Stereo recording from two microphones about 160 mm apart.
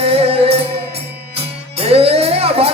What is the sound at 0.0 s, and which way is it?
Music, 35° right (ahead or behind).